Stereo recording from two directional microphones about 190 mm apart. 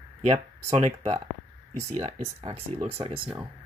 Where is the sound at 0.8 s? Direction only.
35° right (ahead or behind).